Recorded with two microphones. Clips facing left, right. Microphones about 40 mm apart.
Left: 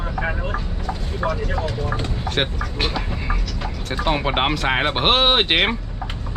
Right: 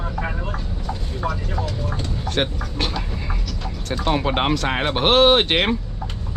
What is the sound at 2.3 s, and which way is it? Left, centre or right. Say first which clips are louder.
Speech: even; centre.